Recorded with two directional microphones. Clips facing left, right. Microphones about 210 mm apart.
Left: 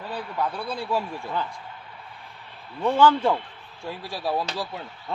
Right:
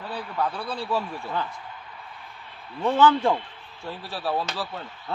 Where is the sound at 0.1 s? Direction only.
10° left (ahead or behind).